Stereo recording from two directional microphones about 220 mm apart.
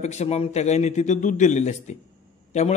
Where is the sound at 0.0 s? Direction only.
30° left (ahead or behind).